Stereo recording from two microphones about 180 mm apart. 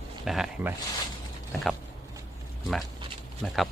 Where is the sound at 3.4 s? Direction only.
Centre (ahead or behind).